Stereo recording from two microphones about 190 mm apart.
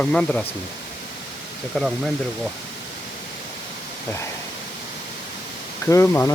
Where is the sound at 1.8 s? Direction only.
Centre (ahead or behind).